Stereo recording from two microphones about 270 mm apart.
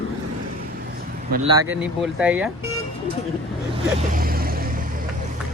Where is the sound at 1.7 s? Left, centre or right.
Centre.